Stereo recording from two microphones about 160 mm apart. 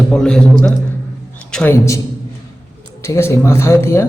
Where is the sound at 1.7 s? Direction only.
20° left (ahead or behind).